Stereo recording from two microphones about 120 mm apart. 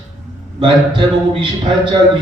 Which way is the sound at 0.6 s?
45° right (ahead or behind).